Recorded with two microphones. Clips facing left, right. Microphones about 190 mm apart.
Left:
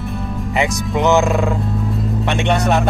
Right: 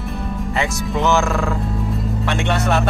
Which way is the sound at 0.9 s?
20° left (ahead or behind).